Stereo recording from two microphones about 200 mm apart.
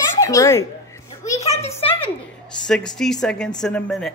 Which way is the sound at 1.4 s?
30° left (ahead or behind).